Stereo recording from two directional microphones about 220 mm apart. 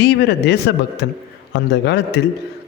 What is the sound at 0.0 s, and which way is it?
Speech, 50° left (ahead or behind).